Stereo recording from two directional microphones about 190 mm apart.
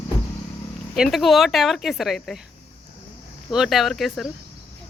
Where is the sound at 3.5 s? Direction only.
Centre (ahead or behind).